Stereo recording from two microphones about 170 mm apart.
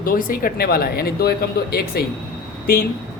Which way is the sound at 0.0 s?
55° left (ahead or behind).